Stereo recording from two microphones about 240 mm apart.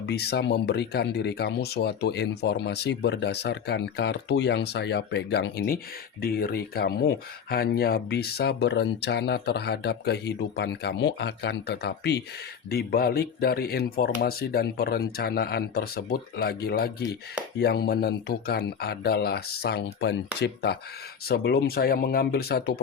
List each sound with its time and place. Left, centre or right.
0.0 s speech: left